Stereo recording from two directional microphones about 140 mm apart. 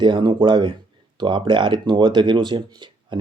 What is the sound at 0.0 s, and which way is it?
Speech, 35° right (ahead or behind).